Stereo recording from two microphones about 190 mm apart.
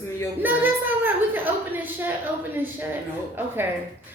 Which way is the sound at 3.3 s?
10° right (ahead or behind).